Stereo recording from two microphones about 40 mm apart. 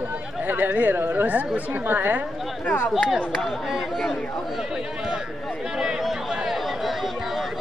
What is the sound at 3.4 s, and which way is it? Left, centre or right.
Speech, centre.